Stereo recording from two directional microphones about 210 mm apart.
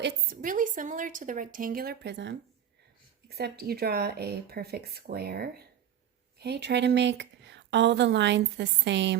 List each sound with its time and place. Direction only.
0.0 s a woman's voice: 40° right (ahead or behind)